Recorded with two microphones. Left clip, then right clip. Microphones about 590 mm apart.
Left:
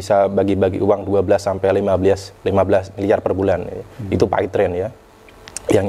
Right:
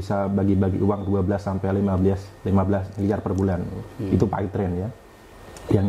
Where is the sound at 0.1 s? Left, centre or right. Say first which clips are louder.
Left 9 dB; left.